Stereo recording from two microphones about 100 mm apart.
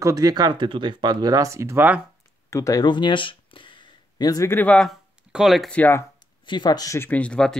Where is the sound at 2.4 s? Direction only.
30° left (ahead or behind).